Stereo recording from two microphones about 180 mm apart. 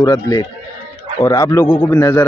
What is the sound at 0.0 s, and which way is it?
A man's voice, 20° left (ahead or behind).